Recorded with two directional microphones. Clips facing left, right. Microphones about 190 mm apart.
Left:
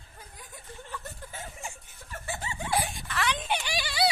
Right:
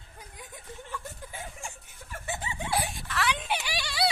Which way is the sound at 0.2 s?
20° right (ahead or behind).